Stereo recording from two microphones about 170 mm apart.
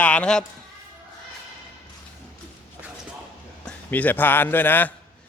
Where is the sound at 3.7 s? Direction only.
10° left (ahead or behind).